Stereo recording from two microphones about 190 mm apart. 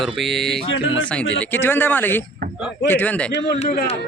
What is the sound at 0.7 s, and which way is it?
Speech, 90° left.